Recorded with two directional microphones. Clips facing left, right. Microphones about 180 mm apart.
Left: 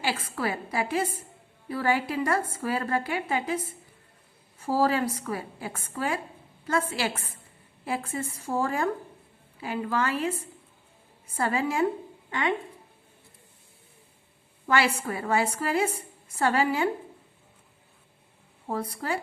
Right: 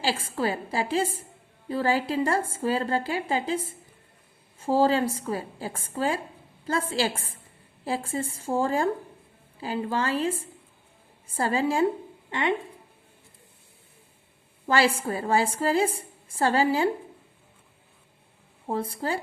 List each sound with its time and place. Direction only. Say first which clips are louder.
0.0 s a woman's voice: right 2 dB; 30° right (ahead or behind)
11.3 s a woman's voice: right 2 dB; 30° right (ahead or behind)
14.7 s a woman's voice: right 2 dB; 30° right (ahead or behind)
18.7 s a woman's voice: right 2 dB; 30° right (ahead or behind)